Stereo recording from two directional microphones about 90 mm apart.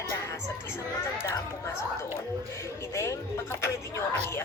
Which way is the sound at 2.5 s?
30° left (ahead or behind).